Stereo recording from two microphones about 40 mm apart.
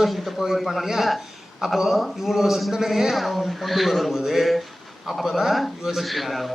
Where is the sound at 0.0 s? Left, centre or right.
Centre.